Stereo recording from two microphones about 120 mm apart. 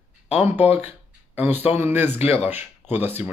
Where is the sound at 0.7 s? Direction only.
15° right (ahead or behind).